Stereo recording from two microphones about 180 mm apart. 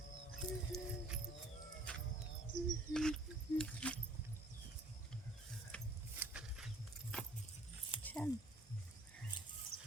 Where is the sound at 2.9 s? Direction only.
5° left (ahead or behind).